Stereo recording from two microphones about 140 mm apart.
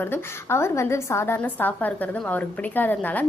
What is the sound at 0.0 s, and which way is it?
A woman's voice, 15° left (ahead or behind).